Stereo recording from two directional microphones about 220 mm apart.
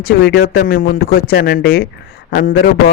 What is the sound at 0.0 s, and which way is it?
A man's voice, 45° left (ahead or behind).